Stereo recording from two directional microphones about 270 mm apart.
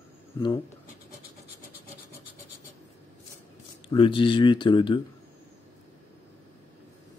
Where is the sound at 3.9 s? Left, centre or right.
Centre.